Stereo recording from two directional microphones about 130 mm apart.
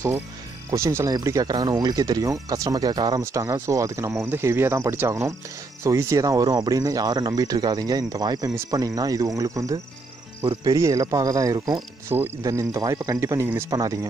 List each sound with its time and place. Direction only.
0.7 s speech: 25° right (ahead or behind)
12.1 s speech: 20° right (ahead or behind)